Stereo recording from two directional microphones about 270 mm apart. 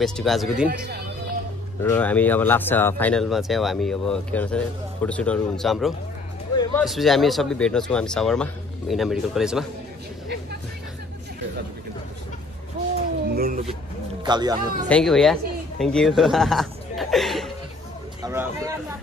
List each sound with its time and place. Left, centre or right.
0.0 s speech: centre
6.5 s a sound: centre
6.8 s speech: centre
13.3 s speech: right
14.2 s speech: centre
14.9 s speech: centre
18.2 s speech: centre